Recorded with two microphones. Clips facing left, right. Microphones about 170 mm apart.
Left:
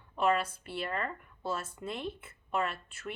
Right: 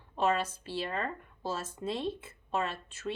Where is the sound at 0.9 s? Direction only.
25° right (ahead or behind).